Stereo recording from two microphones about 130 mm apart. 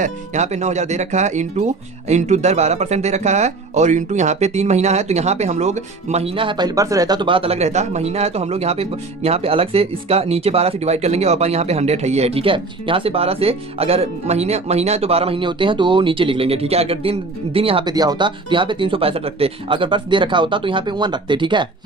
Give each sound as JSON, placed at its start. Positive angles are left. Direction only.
{"t": 0.0, "sound": "speech", "side_deg": -60}
{"t": 17.8, "sound": "speech", "side_deg": -30}